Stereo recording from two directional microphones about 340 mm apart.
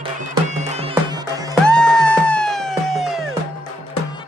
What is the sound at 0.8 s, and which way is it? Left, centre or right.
Music, centre.